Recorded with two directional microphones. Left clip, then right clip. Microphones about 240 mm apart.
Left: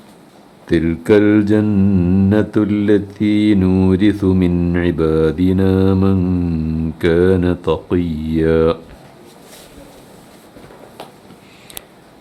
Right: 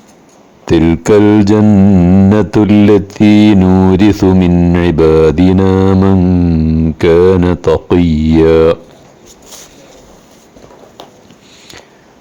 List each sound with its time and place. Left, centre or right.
0.7 s speech: right